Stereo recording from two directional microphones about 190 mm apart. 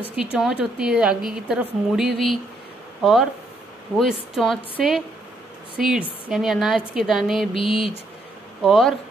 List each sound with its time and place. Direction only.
0.1 s a woman's voice: 5° right (ahead or behind)
7.5 s a sound: 30° left (ahead or behind)
8.6 s a woman's voice: centre (ahead or behind)